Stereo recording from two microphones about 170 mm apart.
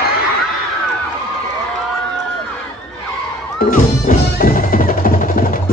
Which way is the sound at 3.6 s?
55° left (ahead or behind).